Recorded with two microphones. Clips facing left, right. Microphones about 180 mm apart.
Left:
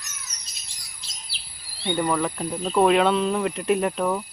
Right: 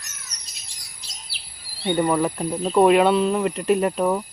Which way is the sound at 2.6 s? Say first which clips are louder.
Right 3 dB; 10° right (ahead or behind).